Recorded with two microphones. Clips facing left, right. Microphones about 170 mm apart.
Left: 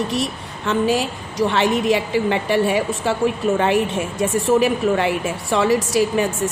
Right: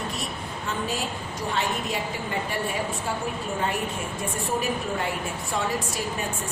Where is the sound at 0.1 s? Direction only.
90° left.